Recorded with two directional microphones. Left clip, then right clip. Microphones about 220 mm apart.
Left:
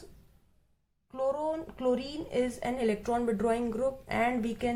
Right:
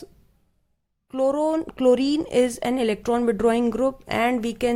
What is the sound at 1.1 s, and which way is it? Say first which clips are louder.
Speech: right 9 dB; 50° right (ahead or behind).